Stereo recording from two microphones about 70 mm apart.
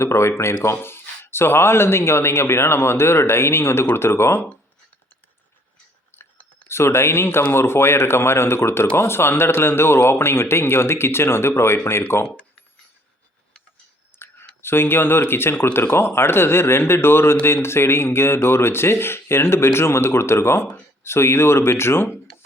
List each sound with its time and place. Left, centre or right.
0.0 s speech: left
6.7 s speech: left
12.2 s speech: centre
14.1 s whispering: left
14.6 s speech: left